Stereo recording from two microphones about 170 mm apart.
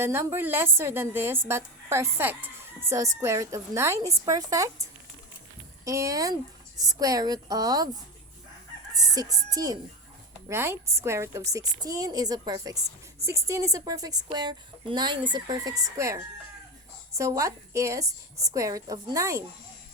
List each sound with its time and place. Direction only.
0.0 s a woman's voice: 15° right (ahead or behind)
9.0 s a woman's voice: 25° right (ahead or behind)